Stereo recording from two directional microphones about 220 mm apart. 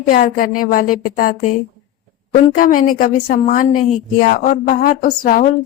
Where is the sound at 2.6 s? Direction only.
40° left (ahead or behind).